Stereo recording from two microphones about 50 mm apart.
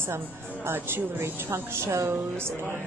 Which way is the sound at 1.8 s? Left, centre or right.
Right.